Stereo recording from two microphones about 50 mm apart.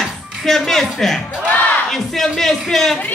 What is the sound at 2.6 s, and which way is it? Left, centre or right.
Speech, centre.